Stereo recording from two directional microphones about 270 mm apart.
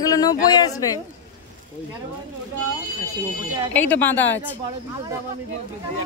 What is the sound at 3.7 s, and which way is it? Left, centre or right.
Speech, centre.